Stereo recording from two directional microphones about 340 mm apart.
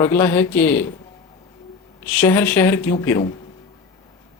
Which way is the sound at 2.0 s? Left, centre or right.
Centre.